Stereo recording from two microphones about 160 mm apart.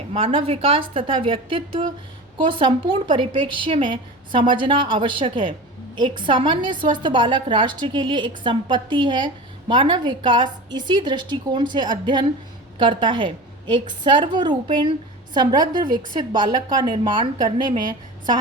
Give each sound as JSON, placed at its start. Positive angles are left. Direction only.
{"t": 0.1, "sound": "a woman's voice", "side_deg": -35}